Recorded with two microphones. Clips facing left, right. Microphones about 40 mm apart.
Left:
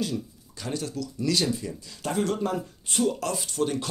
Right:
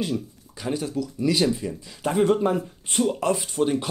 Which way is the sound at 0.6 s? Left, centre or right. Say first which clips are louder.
Right 5 dB; centre.